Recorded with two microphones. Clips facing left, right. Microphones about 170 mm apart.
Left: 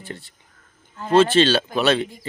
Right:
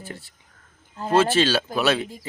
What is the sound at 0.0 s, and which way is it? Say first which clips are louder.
A man's voice: left 2 dB; 5° right (ahead or behind).